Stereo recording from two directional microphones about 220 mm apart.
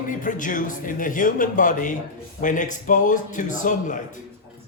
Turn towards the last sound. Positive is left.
turn(degrees=35)  # may be behind; listen again after turning